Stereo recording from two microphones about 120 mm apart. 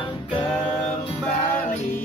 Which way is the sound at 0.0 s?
45° left (ahead or behind).